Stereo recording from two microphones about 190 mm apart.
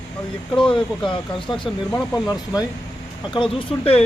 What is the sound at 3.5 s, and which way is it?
Speech, 30° left (ahead or behind).